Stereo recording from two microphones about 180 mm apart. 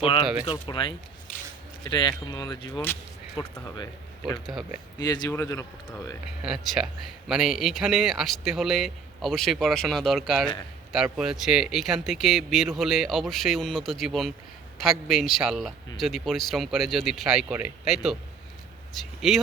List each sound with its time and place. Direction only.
0.0 s speech: 30° left (ahead or behind)
4.3 s speech: centre (ahead or behind)
4.9 s speech: 25° left (ahead or behind)
6.4 s speech: 5° right (ahead or behind)